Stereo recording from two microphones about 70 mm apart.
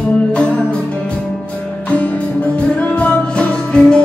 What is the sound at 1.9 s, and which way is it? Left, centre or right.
Music, centre.